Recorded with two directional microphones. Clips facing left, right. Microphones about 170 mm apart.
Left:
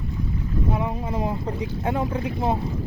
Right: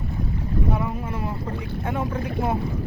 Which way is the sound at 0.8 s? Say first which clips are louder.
Left 2 dB; 15° left (ahead or behind).